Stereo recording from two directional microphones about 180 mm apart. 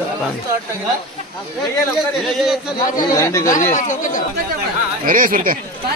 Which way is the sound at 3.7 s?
45° left (ahead or behind).